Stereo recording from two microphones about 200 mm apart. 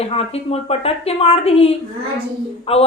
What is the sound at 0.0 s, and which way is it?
A woman's voice, 30° left (ahead or behind).